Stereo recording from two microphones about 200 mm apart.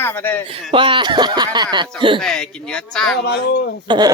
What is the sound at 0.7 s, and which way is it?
Speech, 25° right (ahead or behind).